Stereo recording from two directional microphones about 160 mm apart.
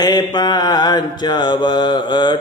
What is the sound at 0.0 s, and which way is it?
Mantra, 25° left (ahead or behind).